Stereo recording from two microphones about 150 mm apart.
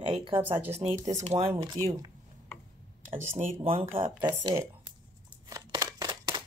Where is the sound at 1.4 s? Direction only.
40° right (ahead or behind).